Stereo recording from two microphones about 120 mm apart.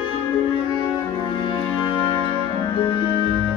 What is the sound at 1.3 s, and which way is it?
Music, 45° left (ahead or behind).